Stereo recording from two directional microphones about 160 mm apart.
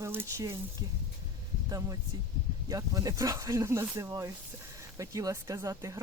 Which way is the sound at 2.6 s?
20° right (ahead or behind).